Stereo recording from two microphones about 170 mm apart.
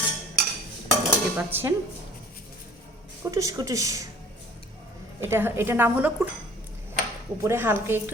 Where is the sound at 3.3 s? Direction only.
20° right (ahead or behind).